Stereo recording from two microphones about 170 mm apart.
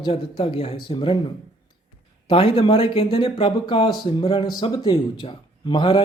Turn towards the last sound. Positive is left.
turn(degrees=30)  # may be behind; listen again after turning